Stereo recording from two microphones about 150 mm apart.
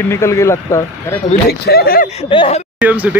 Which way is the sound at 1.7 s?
90° left.